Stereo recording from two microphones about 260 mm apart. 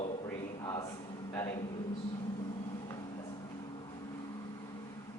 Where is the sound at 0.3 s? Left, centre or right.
Centre.